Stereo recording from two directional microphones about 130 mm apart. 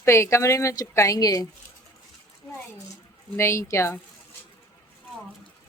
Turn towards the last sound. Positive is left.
turn(degrees=20)  # may be behind; listen again after turning